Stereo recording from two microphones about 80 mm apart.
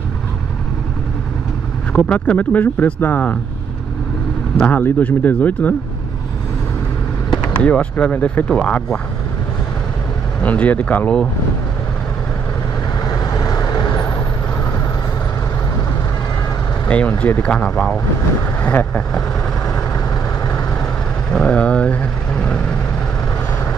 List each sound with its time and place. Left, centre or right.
1.9 s speech: centre
4.6 s speech: centre
7.2 s speech: centre
10.4 s speech: centre
13.1 s vehicle: left
16.8 s a sound: centre
17.2 s speech: centre
21.3 s vehicle: centre